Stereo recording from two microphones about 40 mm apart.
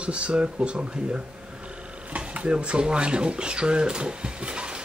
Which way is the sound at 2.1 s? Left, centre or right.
Right.